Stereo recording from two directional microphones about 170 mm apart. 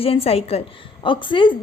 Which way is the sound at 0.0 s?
35° left (ahead or behind).